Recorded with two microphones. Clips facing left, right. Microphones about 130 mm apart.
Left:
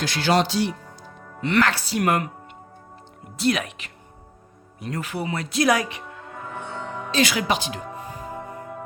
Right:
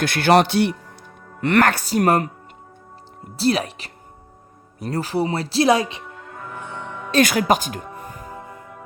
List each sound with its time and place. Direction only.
0.0 s speech: 55° right (ahead or behind); by 2.3 s 35° right (ahead or behind)
3.3 s speech: 35° right (ahead or behind)
7.1 s speech: 50° right (ahead or behind)